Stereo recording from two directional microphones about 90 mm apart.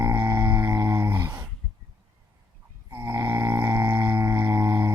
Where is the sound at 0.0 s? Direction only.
25° right (ahead or behind).